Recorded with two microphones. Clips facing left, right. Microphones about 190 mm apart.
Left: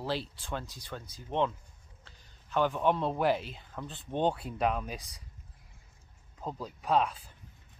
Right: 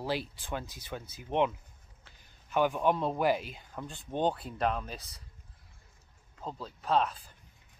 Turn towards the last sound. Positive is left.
turn(degrees=5)  # may be behind; listen again after turning